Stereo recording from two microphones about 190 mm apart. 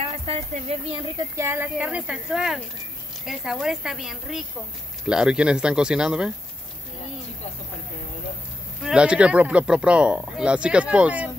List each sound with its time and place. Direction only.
0.0 s speech: 30° right (ahead or behind)
1.3 s speech: 15° right (ahead or behind)
8.8 s speech: 5° right (ahead or behind)